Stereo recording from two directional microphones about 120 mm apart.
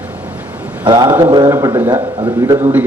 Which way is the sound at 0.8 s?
35° right (ahead or behind).